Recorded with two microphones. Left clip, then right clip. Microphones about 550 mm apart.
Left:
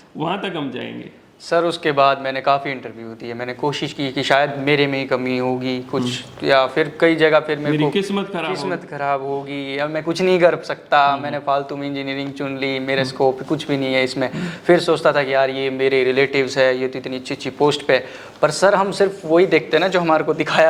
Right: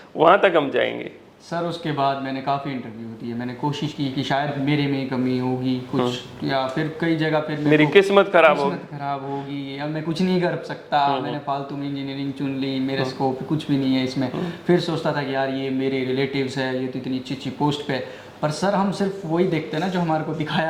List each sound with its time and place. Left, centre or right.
0.2 s speech: right
1.5 s a man's voice: left
7.7 s speech: right
9.6 s a man's voice: left